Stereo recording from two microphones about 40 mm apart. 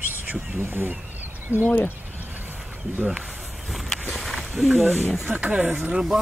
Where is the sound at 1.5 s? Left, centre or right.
Right.